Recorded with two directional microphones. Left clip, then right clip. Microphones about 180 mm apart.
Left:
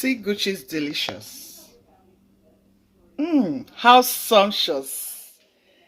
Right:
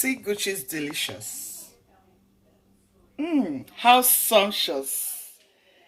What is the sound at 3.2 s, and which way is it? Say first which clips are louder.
Speech: left 4 dB; 60° left (ahead or behind).